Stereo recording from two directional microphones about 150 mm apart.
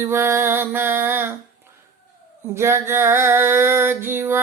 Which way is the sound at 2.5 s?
15° right (ahead or behind).